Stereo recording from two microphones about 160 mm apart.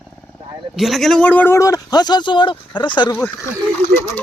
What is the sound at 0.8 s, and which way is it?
Speech, centre (ahead or behind).